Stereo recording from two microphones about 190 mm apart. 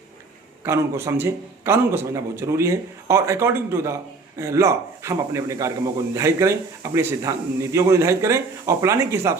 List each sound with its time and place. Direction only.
0.6 s a man's voice: 15° right (ahead or behind)